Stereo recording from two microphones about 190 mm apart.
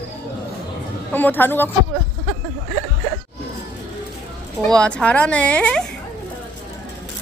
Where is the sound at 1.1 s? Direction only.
10° left (ahead or behind).